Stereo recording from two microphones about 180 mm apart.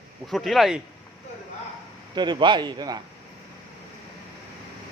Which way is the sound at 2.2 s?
25° right (ahead or behind).